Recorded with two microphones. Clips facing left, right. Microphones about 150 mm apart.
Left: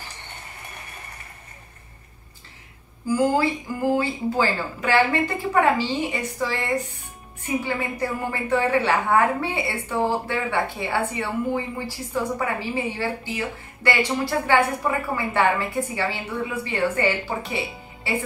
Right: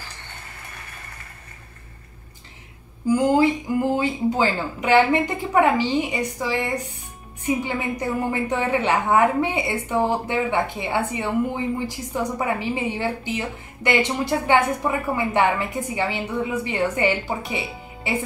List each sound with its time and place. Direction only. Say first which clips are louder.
3.1 s a woman's voice: right 3 dB; 20° right (ahead or behind)